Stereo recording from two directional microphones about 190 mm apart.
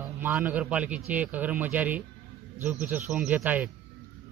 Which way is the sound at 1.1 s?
10° right (ahead or behind).